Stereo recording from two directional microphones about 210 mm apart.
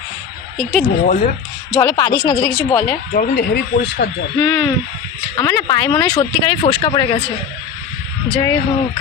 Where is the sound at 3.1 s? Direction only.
45° left (ahead or behind).